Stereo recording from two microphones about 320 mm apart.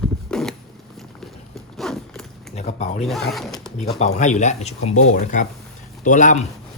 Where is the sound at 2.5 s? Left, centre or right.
Left.